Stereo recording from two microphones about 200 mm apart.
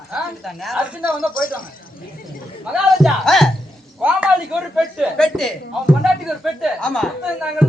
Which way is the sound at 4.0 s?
5° right (ahead or behind).